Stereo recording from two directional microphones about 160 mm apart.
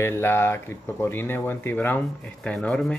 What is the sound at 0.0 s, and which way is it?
Speech, 15° left (ahead or behind).